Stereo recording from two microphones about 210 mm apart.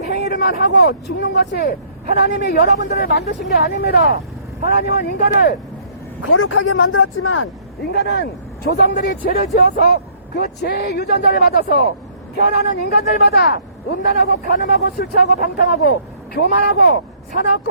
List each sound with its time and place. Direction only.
0.1 s speech: 50° left (ahead or behind)
6.2 s speech: 80° left
7.9 s speech: 50° left (ahead or behind)